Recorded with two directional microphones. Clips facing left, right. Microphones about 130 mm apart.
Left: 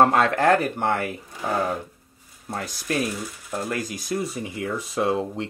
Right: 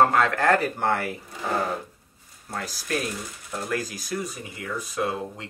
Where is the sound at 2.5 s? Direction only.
20° left (ahead or behind).